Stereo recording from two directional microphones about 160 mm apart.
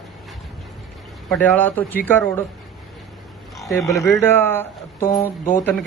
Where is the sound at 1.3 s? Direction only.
10° left (ahead or behind).